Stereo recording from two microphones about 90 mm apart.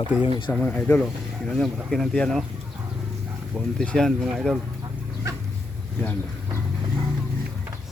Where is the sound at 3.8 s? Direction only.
10° left (ahead or behind).